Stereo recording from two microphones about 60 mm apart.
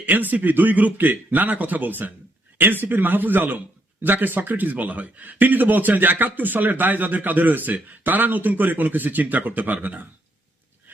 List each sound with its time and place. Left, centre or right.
0.0 s a man's voice: right